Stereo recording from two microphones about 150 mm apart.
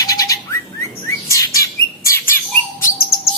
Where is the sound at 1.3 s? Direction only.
20° left (ahead or behind).